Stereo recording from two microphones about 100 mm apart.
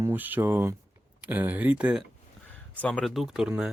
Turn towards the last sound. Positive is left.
turn(degrees=-5)  # may be behind; listen again after turning